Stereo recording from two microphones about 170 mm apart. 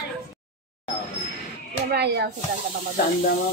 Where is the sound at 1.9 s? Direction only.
80° right.